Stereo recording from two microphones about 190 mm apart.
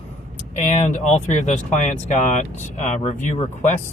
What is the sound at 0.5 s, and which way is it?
Speech, 40° left (ahead or behind).